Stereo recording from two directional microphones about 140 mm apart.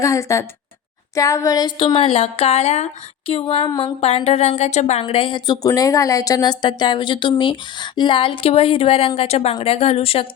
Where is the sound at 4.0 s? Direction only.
45° left (ahead or behind).